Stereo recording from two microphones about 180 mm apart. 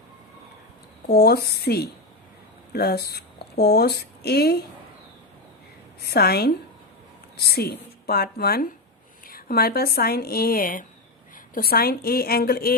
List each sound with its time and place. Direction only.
1.0 s speech: 60° left (ahead or behind)
6.0 s speech: 60° left (ahead or behind)